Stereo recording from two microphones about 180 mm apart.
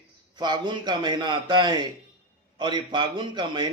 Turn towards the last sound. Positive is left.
turn(degrees=-25)  # may be behind; listen again after turning